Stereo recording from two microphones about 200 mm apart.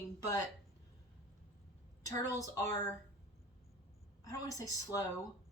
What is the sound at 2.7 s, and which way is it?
Speech, 15° left (ahead or behind).